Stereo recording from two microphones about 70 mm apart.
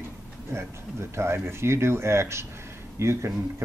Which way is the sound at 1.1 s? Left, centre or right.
Right.